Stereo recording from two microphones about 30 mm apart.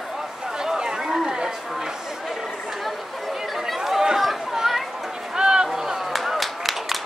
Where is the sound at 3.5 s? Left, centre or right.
Centre.